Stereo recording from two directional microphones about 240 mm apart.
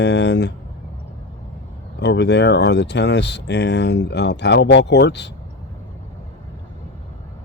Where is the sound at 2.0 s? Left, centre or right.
Left.